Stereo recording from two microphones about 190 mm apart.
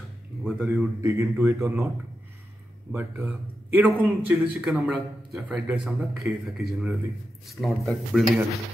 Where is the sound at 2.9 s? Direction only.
10° right (ahead or behind).